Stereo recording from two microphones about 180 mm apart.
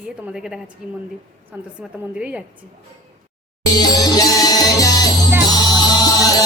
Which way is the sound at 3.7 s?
20° left (ahead or behind).